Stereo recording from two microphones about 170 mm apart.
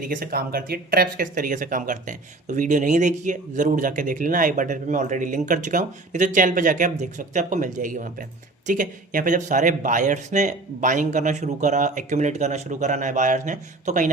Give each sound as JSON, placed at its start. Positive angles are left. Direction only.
{"t": 0.0, "sound": "speech", "side_deg": -55}